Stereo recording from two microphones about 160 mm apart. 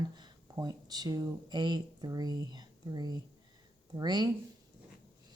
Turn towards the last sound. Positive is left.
turn(degrees=-25)  # may be behind; listen again after turning